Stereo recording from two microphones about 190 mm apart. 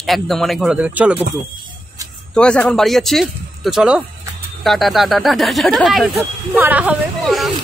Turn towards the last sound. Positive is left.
turn(degrees=0)  # may be behind; listen again after turning